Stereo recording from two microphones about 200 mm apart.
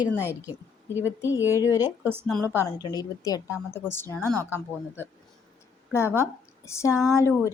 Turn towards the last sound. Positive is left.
turn(degrees=15)  # may be behind; listen again after turning